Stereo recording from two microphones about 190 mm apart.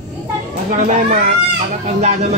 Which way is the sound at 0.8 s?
40° right (ahead or behind).